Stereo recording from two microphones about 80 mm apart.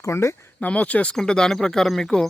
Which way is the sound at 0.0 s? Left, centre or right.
Left.